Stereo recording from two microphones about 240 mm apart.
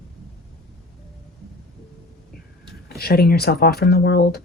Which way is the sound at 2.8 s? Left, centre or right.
Left.